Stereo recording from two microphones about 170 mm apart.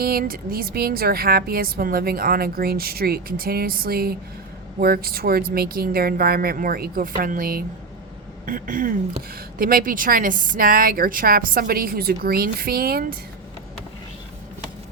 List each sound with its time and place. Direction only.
0.0 s speech: 60° right (ahead or behind)